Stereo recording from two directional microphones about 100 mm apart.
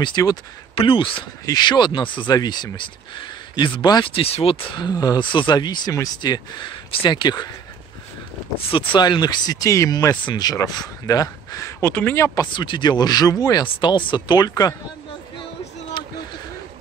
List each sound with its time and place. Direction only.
0.0 s speech: 40° left (ahead or behind)
0.7 s speech: 60° left (ahead or behind)
1.4 s speech: 45° left (ahead or behind)
4.1 s speech: 70° left (ahead or behind)
4.7 s speech: 40° left (ahead or behind)
5.2 s speech: 55° left (ahead or behind)
6.9 s speech: 60° left (ahead or behind)
8.6 s speech: 60° left (ahead or behind)
9.0 s speech: 45° left (ahead or behind)
11.9 s speech: 15° left (ahead or behind)
12.4 s speech: 50° left (ahead or behind)
13.7 s speech: 55° left (ahead or behind); by 14.8 s 35° left (ahead or behind)
16.0 s a sound: 50° left (ahead or behind)